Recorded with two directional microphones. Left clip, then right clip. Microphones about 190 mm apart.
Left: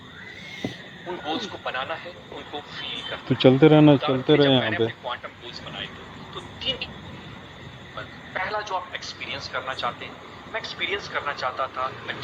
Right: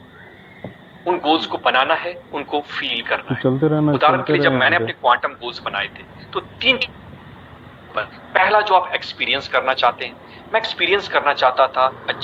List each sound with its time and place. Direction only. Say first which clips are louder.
1.0 s a man's voice: right 12 dB; 35° right (ahead or behind)
3.3 s speech: left 5 dB; 20° left (ahead or behind)
4.4 s a man's voice: right 5 dB; 40° right (ahead or behind)
7.9 s a man's voice: right 13 dB; 40° right (ahead or behind)